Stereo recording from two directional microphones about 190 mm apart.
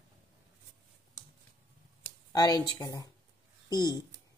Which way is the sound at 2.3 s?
20° left (ahead or behind).